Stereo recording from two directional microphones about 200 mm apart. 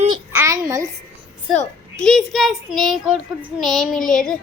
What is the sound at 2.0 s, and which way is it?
A child's voice, centre (ahead or behind).